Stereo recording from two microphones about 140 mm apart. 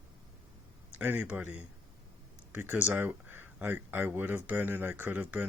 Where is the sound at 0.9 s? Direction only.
15° right (ahead or behind).